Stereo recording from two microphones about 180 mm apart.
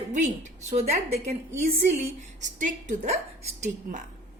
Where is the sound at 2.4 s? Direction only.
45° right (ahead or behind).